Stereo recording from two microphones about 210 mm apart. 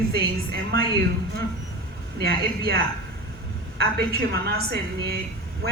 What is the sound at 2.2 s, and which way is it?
Speech, 50° right (ahead or behind).